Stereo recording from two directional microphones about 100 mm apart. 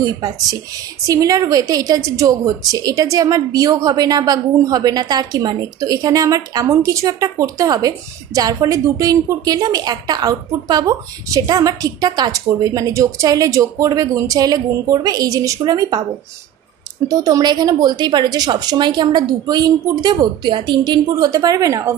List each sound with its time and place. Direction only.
0.0 s a woman's voice: 35° right (ahead or behind)
17.1 s a woman's voice: 35° right (ahead or behind)